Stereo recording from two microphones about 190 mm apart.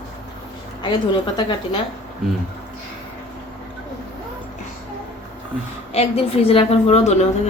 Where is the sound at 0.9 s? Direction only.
25° left (ahead or behind).